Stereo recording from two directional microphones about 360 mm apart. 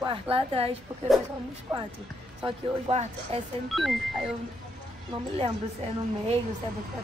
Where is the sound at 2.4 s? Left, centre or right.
Centre.